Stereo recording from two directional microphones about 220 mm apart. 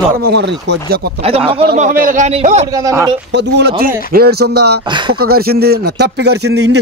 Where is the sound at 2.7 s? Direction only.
15° right (ahead or behind).